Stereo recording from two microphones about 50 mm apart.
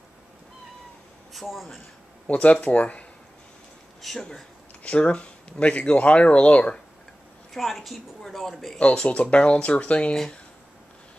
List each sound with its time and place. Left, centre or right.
1.3 s speech: centre
2.2 s speech: left
4.0 s speech: centre
4.8 s speech: left
7.5 s speech: centre
8.7 s speech: left